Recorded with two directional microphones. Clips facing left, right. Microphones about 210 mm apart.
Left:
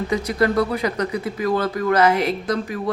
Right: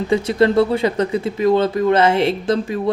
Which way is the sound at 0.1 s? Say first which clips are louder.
Right 6 dB; 25° right (ahead or behind).